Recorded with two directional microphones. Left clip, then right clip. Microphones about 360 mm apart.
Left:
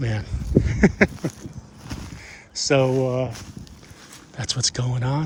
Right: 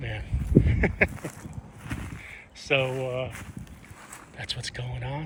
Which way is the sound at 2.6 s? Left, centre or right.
Left.